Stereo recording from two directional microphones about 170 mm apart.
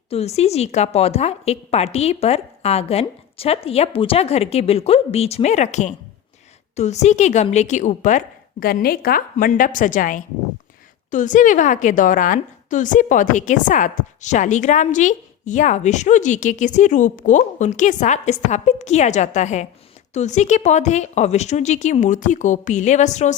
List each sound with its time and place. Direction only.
0.1 s a woman's voice: 40° left (ahead or behind)
8.6 s a woman's voice: 60° left (ahead or behind); by 23.3 s 45° left (ahead or behind)